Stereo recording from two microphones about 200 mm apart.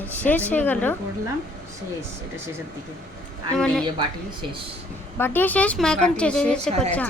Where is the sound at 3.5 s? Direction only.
5° left (ahead or behind).